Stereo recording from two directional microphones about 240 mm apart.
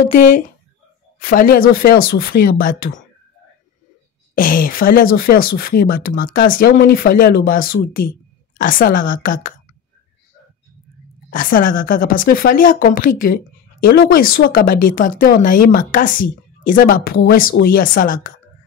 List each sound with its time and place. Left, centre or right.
0.1 s speech: left
4.4 s speech: left
11.2 s speech: left